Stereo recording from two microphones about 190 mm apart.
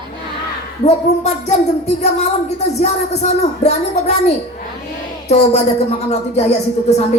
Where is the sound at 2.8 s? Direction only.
35° left (ahead or behind).